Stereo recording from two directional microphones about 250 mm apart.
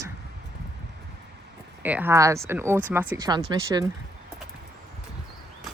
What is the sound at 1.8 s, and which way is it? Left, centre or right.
Speech, centre.